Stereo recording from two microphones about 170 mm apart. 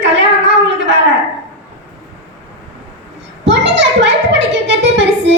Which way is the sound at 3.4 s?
90° right.